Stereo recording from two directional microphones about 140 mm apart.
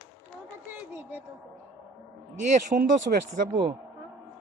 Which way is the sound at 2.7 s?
35° right (ahead or behind).